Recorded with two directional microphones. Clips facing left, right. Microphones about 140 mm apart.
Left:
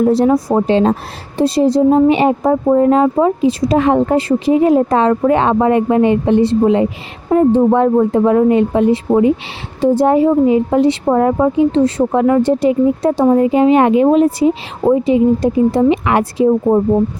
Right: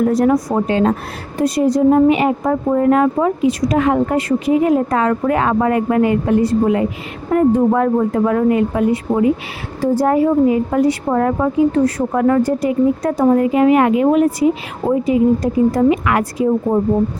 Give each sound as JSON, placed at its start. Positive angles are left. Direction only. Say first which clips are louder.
{"t": 0.0, "sound": "speech", "louder": "left 2 dB", "side_deg": 25}